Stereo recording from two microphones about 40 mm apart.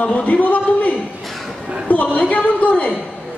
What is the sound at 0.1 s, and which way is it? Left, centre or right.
A man's voice, left.